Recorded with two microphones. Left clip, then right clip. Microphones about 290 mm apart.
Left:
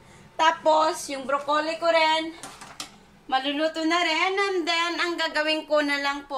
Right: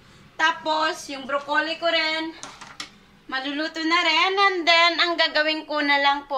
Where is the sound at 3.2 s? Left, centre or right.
Centre.